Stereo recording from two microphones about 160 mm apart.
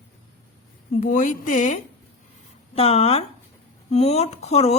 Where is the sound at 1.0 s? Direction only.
55° left (ahead or behind).